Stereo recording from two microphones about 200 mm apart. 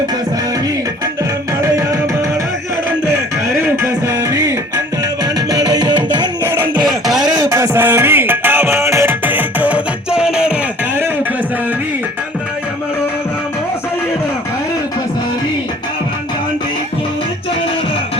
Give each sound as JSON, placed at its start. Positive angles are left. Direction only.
{"t": 1.6, "sound": "music", "side_deg": -15}
{"t": 3.1, "sound": "music", "side_deg": -15}
{"t": 7.0, "sound": "a sound", "side_deg": 0}
{"t": 7.3, "sound": "music", "side_deg": -20}